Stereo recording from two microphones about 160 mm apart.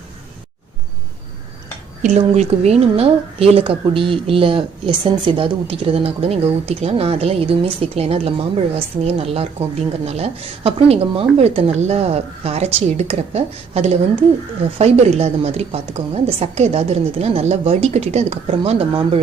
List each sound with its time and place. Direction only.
2.0 s a woman's voice: 45° right (ahead or behind)